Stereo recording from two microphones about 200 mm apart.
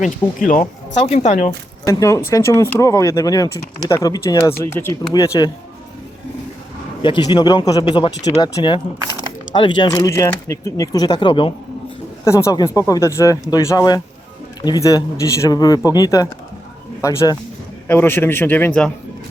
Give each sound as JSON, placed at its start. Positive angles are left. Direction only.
{"t": 0.0, "sound": "a woman's voice", "side_deg": 40}
{"t": 1.8, "sound": "speech", "side_deg": 15}
{"t": 7.0, "sound": "speech", "side_deg": 20}